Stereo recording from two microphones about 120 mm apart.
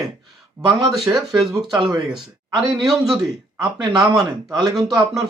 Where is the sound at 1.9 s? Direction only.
35° right (ahead or behind).